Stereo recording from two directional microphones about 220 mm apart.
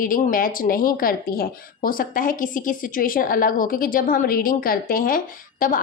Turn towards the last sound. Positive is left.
turn(degrees=40)  # may be behind; listen again after turning